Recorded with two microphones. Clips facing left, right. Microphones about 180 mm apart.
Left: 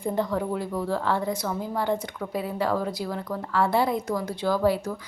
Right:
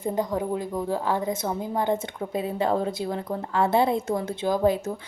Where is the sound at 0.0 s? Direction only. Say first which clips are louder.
Even; 20° right (ahead or behind).